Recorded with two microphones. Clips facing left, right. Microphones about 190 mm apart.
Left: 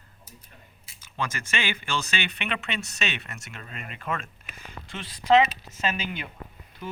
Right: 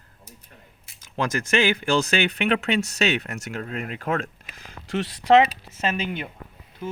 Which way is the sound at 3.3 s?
70° right (ahead or behind).